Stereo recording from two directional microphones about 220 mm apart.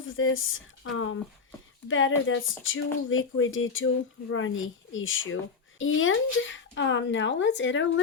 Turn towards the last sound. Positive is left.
turn(degrees=55)  # may be behind; listen again after turning